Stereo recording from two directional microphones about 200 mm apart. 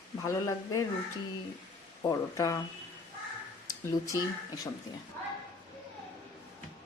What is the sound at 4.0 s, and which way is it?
Speech, 15° left (ahead or behind).